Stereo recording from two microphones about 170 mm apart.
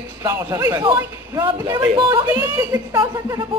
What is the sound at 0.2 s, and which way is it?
A man's voice, 20° right (ahead or behind).